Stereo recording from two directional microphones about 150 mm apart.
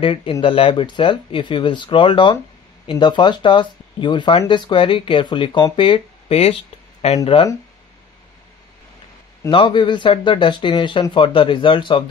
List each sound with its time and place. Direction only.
0.0 s speech: 35° left (ahead or behind)
9.5 s speech: 35° left (ahead or behind)